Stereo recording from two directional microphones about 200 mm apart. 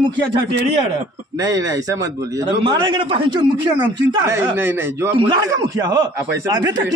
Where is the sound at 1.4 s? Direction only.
15° right (ahead or behind).